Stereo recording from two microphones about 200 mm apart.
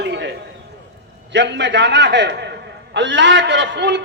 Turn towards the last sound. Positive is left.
turn(degrees=-60)  # may be behind; listen again after turning